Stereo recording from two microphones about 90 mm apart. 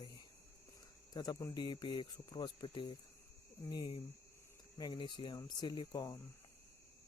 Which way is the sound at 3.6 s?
50° left (ahead or behind).